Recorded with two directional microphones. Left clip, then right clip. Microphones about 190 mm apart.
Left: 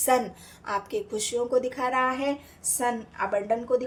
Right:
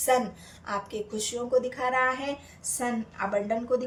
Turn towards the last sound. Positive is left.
turn(degrees=35)  # may be behind; listen again after turning